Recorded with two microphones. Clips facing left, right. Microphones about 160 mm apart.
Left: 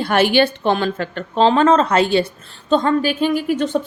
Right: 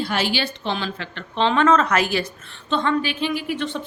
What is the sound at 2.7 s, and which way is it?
A woman's voice, 40° left (ahead or behind).